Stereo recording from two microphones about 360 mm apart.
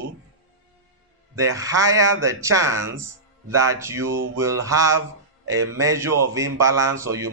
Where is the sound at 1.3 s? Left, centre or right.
Centre.